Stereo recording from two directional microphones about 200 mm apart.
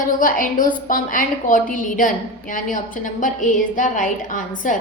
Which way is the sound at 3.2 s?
40° left (ahead or behind).